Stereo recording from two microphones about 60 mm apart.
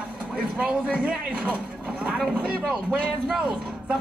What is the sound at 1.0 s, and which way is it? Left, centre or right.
Speech, right.